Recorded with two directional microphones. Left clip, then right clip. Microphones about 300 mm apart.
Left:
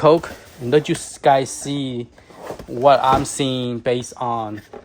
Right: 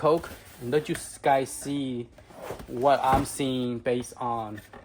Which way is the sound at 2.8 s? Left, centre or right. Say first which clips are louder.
Left 8 dB; left.